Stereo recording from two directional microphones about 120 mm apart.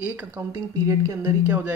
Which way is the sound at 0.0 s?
15° right (ahead or behind).